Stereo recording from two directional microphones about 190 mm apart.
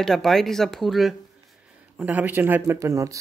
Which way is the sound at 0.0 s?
Centre (ahead or behind).